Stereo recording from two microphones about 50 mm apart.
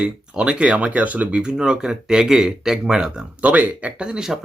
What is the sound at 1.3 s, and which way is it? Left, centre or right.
Speech, centre.